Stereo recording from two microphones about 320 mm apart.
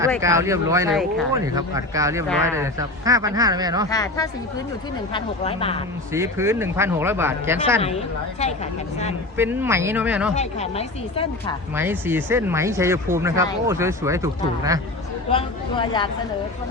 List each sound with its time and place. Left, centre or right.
0.2 s speech: centre
3.8 s speech: centre
6.1 s speech: centre
7.8 s speech: centre
9.4 s speech: centre
10.3 s speech: centre
11.7 s speech: centre
15.3 s speech: centre